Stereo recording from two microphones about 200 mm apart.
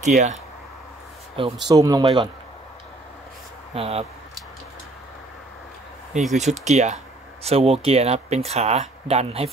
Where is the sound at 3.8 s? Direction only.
30° right (ahead or behind).